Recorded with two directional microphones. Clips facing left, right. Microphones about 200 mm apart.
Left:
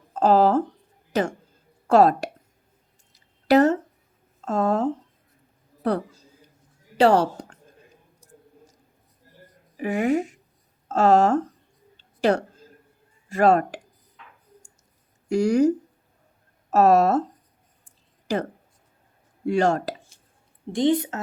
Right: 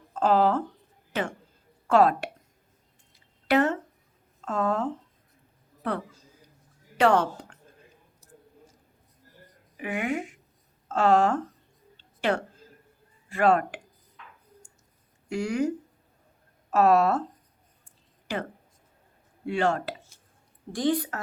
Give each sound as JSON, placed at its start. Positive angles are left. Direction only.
{"t": 0.1, "sound": "speech", "side_deg": 40}
{"t": 3.1, "sound": "a sound", "side_deg": 40}
{"t": 4.4, "sound": "a man's voice", "side_deg": 40}
{"t": 9.7, "sound": "speech", "side_deg": 40}
{"t": 11.9, "sound": "a sound", "side_deg": 40}
{"t": 13.2, "sound": "speech", "side_deg": 40}
{"t": 15.3, "sound": "speech", "side_deg": 40}
{"t": 18.3, "sound": "speech", "side_deg": 40}
{"t": 19.5, "sound": "speech", "side_deg": 40}
{"t": 20.7, "sound": "speech", "side_deg": 20}